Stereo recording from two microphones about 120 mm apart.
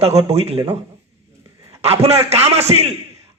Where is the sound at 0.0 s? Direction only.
60° right (ahead or behind).